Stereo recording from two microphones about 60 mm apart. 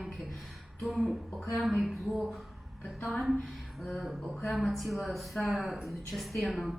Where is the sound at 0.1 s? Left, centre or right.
Centre.